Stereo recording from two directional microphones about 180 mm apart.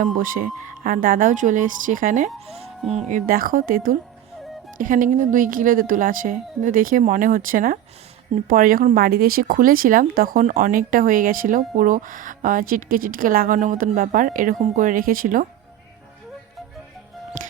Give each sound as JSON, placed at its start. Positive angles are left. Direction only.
{"t": 0.0, "sound": "speech", "side_deg": -50}